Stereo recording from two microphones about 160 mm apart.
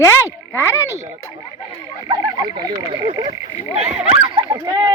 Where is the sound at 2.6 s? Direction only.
30° right (ahead or behind).